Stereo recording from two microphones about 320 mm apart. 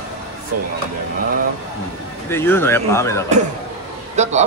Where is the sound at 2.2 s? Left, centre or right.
Centre.